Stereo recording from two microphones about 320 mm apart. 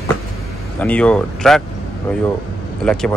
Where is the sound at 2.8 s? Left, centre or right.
Centre.